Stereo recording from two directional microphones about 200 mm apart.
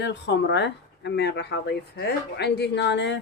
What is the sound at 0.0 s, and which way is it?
Speech, 60° left (ahead or behind).